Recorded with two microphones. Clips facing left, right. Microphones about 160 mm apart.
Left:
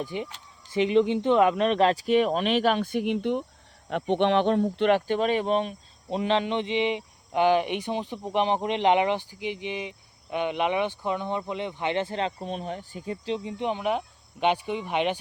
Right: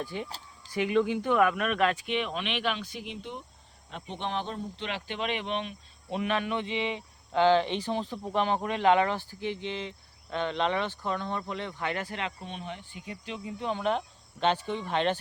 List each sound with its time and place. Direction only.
0.0 s speech: 15° left (ahead or behind); by 4.9 s 70° left (ahead or behind)
4.9 s speech: 45° left (ahead or behind); by 15.2 s 15° left (ahead or behind)